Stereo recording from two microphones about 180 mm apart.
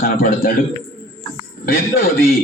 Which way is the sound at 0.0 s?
55° left (ahead or behind).